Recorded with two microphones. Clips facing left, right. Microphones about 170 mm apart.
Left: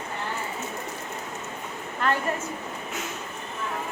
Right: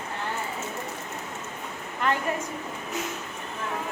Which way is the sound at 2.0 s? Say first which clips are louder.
Left 1 dB; 15° right (ahead or behind).